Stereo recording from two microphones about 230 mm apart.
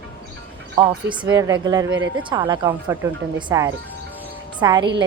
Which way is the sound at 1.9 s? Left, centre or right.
Right.